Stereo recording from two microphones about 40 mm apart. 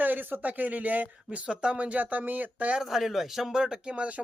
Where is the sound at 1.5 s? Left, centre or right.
Right.